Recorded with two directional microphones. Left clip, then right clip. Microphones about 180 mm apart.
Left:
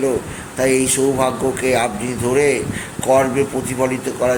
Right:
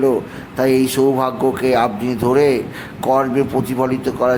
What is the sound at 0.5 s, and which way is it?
A man's voice, 15° right (ahead or behind).